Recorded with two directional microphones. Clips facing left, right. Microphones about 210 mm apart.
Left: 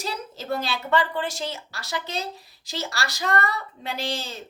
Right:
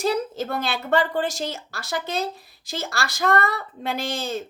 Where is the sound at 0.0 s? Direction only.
55° right (ahead or behind).